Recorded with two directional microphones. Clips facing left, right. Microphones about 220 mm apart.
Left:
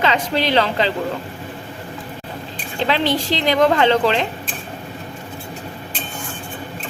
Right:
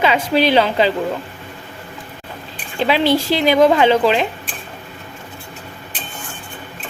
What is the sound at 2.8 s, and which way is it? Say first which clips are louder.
Speech: right 4 dB; 10° right (ahead or behind).